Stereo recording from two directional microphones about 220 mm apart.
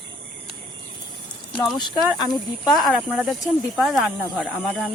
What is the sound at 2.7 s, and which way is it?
Speech, centre (ahead or behind).